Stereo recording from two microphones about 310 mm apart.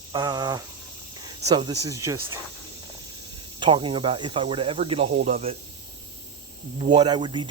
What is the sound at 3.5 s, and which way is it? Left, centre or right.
A man's voice, centre.